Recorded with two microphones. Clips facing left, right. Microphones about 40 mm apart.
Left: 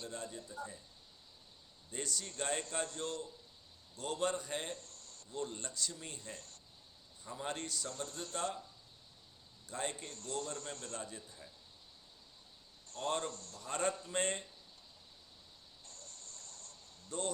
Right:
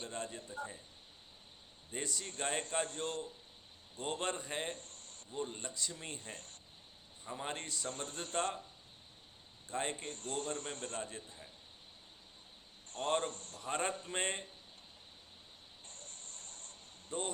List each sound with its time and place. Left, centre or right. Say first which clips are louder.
0.0 s a man's voice: right 2 dB; right
1.9 s a man's voice: right 1 dB; right
5.3 s speech: even; right
6.0 s a man's voice: right 1 dB; right
7.3 s a man's voice: even; right
9.6 s a man's voice: right 2 dB; right
12.9 s a man's voice: right 3 dB; right
15.9 s cricket: right 1 dB; right